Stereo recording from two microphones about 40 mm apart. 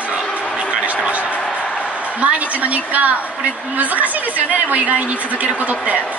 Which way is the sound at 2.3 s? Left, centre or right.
Right.